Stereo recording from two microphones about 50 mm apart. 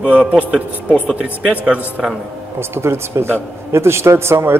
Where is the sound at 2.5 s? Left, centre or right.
Right.